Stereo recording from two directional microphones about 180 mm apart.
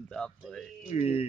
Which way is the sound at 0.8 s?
35° left (ahead or behind).